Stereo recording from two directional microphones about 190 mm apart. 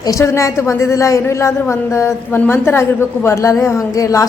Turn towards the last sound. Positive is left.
turn(degrees=15)  # may be behind; listen again after turning